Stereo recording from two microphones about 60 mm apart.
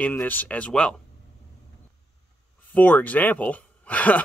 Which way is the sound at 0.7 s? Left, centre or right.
Centre.